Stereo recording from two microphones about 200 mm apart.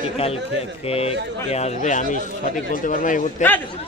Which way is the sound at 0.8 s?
30° left (ahead or behind).